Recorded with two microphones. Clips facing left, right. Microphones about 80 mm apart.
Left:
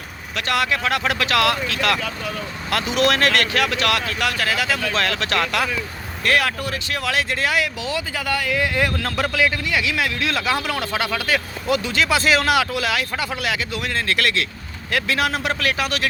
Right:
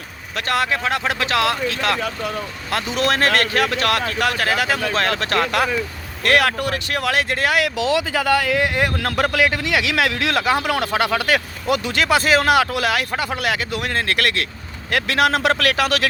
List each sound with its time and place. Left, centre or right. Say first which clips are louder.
0.3 s speech: right 1 dB; right
6.2 s speech: right 3 dB; right
8.6 s speech: right 1 dB; right
10.4 s a man's voice: right 3 dB; right